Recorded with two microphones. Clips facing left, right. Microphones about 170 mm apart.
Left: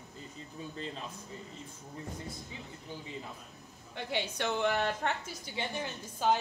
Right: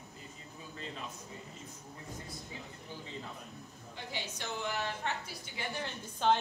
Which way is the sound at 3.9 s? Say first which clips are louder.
Left 7 dB; 65° left (ahead or behind).